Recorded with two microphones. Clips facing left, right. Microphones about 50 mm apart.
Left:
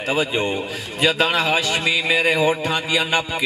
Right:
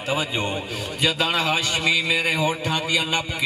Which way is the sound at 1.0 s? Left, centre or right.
Left.